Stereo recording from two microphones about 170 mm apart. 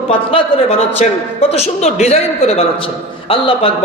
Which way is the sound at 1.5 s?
40° left (ahead or behind).